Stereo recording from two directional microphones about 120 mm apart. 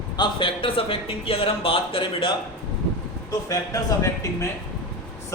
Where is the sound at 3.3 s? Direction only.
25° left (ahead or behind).